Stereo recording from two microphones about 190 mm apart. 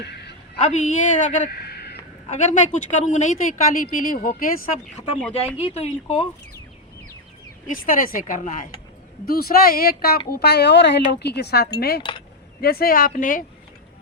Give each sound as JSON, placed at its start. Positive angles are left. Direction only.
{"t": 0.0, "sound": "a sound", "side_deg": 60}
{"t": 0.6, "sound": "a woman's voice", "side_deg": 40}
{"t": 2.3, "sound": "speech", "side_deg": 40}
{"t": 5.5, "sound": "speech", "side_deg": 35}
{"t": 7.7, "sound": "speech", "side_deg": 45}